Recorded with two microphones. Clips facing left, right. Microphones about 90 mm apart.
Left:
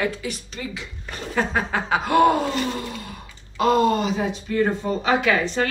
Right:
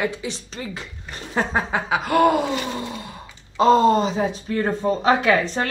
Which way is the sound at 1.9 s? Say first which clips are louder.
Even; centre (ahead or behind).